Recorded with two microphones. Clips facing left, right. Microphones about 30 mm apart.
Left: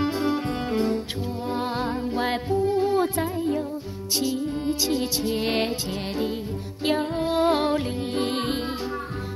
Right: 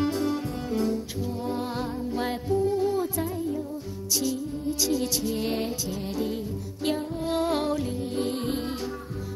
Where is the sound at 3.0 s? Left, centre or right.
Left.